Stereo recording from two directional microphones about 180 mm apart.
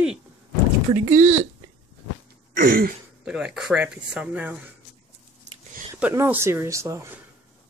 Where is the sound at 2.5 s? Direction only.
55° right (ahead or behind).